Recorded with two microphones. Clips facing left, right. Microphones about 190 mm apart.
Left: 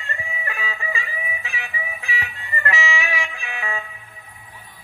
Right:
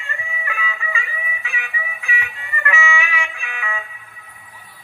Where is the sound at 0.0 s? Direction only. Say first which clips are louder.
Even; 35° left (ahead or behind).